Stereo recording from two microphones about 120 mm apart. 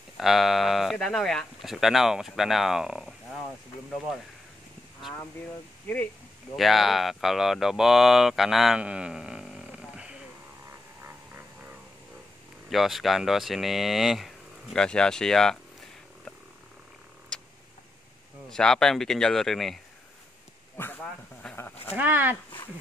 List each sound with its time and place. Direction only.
0.2 s speech: centre (ahead or behind)
5.9 s speech: 10° left (ahead or behind)
6.5 s speech: centre (ahead or behind)
12.6 s speech: centre (ahead or behind)
18.5 s speech: 5° left (ahead or behind)
21.0 s a sound: 10° left (ahead or behind)
21.9 s speech: 15° right (ahead or behind)